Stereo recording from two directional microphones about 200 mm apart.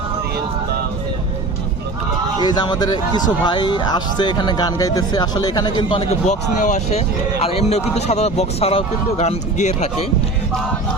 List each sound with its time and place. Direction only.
2.4 s speech: 20° left (ahead or behind)